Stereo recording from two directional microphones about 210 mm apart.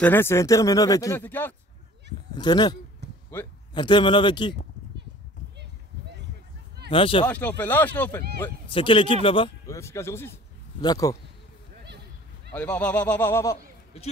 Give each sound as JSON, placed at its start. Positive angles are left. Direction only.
{"t": 0.0, "sound": "speech", "side_deg": 10}
{"t": 2.3, "sound": "a man's voice", "side_deg": 20}
{"t": 5.6, "sound": "a sound", "side_deg": -55}
{"t": 6.9, "sound": "speech", "side_deg": 25}
{"t": 7.2, "sound": "speech", "side_deg": 10}
{"t": 8.6, "sound": "speech", "side_deg": 25}
{"t": 9.8, "sound": "speech", "side_deg": 15}
{"t": 12.5, "sound": "speech", "side_deg": 5}